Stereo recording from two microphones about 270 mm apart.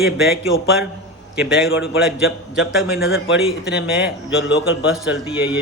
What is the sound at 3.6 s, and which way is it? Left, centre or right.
A man's voice, centre.